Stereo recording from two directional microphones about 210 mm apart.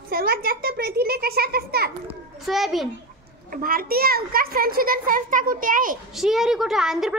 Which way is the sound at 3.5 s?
45° right (ahead or behind).